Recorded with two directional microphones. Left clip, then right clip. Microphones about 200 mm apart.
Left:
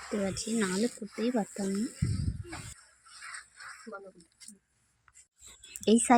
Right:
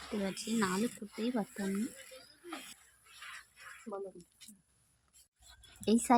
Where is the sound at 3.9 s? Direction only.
20° right (ahead or behind).